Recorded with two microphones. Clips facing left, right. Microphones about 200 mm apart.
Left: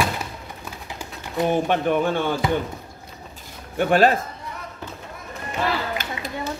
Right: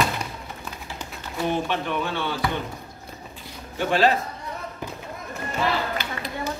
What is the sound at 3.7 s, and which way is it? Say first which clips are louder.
Speech: left 3 dB; 50° left (ahead or behind).